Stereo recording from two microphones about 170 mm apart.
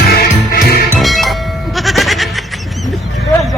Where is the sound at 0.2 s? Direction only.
65° left (ahead or behind).